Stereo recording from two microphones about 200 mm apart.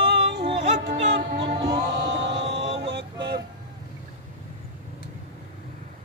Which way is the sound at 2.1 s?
60° right (ahead or behind).